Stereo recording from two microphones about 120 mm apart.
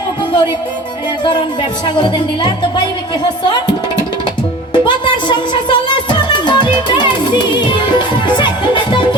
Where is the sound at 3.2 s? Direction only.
40° left (ahead or behind).